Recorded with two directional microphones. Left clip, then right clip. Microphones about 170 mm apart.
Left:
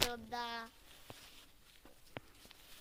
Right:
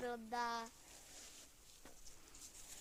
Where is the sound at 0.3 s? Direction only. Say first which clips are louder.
Even; 30° left (ahead or behind).